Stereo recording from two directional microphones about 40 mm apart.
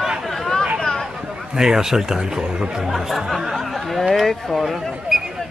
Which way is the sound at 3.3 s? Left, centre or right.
Centre.